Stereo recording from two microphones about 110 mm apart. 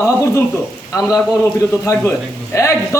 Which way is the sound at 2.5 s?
25° left (ahead or behind).